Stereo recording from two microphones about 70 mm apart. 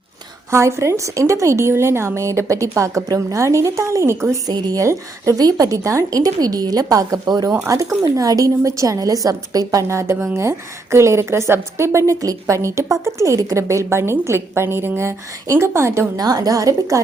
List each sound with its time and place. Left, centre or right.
0.5 s a woman's voice: right
4.4 s a woman's voice: right
7.7 s a woman's voice: right
9.9 s a woman's voice: right
16.1 s a woman's voice: right